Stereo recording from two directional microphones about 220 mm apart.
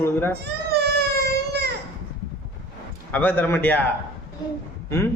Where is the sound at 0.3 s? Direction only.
50° right (ahead or behind).